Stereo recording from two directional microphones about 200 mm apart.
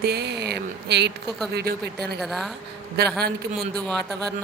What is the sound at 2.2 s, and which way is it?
Speech, centre (ahead or behind).